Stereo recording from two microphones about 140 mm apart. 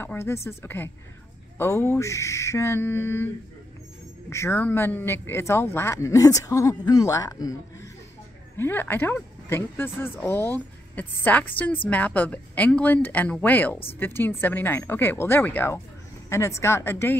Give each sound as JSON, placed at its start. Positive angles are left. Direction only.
{"t": 0.0, "sound": "a woman's voice", "side_deg": 15}
{"t": 4.3, "sound": "a man's voice", "side_deg": 20}
{"t": 8.5, "sound": "a woman's voice", "side_deg": 15}